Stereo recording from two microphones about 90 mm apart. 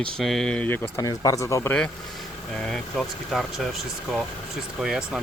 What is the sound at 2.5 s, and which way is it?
Speech, 5° left (ahead or behind).